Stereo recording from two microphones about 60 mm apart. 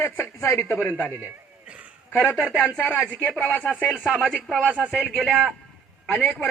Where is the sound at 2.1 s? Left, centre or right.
Left.